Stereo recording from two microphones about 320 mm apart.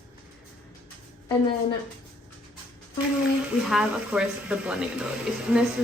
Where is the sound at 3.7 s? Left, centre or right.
Centre.